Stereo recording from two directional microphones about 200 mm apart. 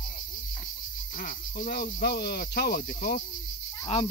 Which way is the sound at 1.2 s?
45° left (ahead or behind).